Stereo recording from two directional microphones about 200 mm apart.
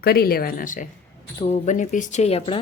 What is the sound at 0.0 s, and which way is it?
Speech, 50° left (ahead or behind).